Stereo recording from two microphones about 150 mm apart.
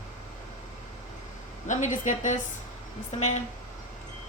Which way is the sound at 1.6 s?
55° left (ahead or behind).